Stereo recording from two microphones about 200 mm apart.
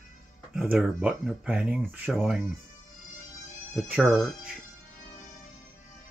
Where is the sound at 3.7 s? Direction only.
Centre (ahead or behind).